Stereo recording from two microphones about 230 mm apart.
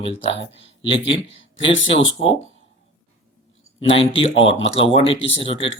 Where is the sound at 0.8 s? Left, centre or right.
Left.